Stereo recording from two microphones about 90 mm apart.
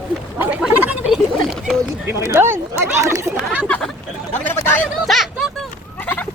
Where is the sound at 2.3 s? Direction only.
30° right (ahead or behind).